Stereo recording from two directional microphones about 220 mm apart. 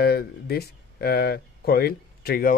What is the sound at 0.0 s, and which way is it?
Speech, 45° left (ahead or behind).